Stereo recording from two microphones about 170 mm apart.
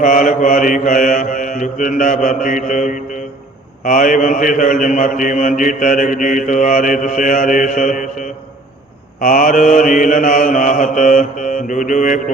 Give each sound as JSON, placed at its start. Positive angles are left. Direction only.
{"t": 0.0, "sound": "a man's voice", "side_deg": 50}
{"t": 9.2, "sound": "a man's voice", "side_deg": 55}